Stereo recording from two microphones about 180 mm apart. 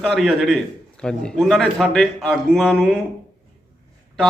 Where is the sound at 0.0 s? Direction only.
Centre (ahead or behind).